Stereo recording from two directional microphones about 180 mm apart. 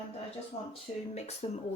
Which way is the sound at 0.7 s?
35° left (ahead or behind).